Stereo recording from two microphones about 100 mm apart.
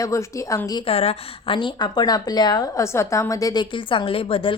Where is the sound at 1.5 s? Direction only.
50° left (ahead or behind).